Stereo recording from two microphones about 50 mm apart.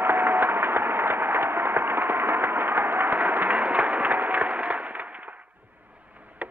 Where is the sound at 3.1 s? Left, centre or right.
Right.